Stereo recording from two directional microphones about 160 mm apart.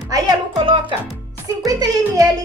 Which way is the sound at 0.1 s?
30° right (ahead or behind).